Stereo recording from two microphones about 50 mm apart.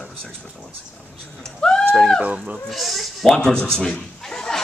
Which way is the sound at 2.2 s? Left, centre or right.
Right.